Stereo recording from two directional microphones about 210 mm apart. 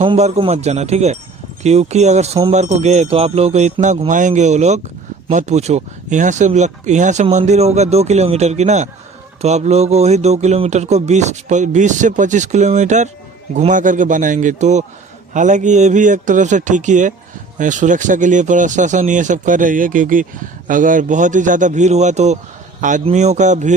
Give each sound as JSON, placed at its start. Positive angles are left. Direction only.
{"t": 0.0, "sound": "speech", "side_deg": -30}